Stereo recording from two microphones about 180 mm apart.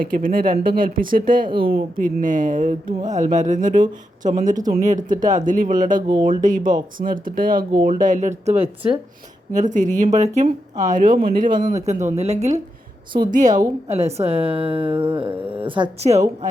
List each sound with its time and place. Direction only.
0.0 s speech: 50° right (ahead or behind)
1.5 s speech: 30° right (ahead or behind)
1.7 s speech: 50° right (ahead or behind)
8.4 s a woman's voice: 30° right (ahead or behind)
9.5 s a woman's voice: 45° right (ahead or behind)